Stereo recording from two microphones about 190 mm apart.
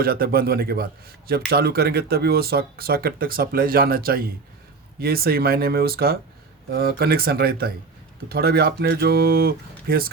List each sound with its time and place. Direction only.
0.0 s speech: 50° right (ahead or behind)